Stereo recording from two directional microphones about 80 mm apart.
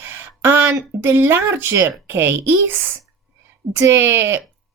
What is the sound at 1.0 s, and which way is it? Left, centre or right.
Speech, right.